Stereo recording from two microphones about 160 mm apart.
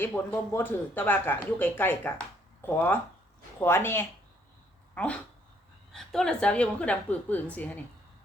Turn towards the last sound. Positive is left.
turn(degrees=10)  # may be behind; listen again after turning